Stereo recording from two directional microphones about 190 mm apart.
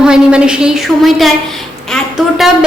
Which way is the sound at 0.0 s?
5° right (ahead or behind).